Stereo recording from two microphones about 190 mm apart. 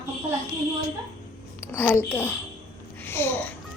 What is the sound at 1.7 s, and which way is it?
A woman's voice, 10° left (ahead or behind).